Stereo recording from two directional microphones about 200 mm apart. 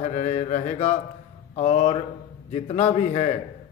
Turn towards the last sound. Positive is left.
turn(degrees=30)  # may be behind; listen again after turning